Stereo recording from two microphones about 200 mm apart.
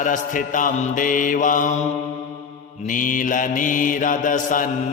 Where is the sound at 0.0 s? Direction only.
40° left (ahead or behind).